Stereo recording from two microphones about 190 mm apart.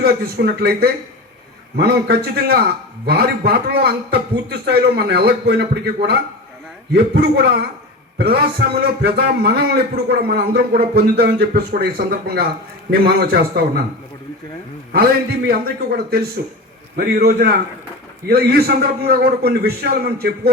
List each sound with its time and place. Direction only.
0.0 s a man's voice: 55° right (ahead or behind)
15.4 s a man's voice: 55° right (ahead or behind)